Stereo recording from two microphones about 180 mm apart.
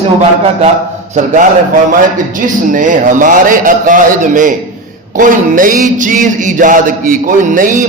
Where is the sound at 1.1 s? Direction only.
45° right (ahead or behind).